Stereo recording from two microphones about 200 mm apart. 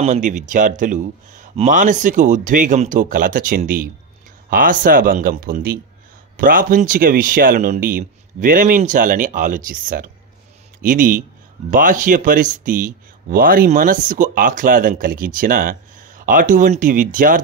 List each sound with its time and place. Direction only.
0.0 s a man's voice: 35° right (ahead or behind)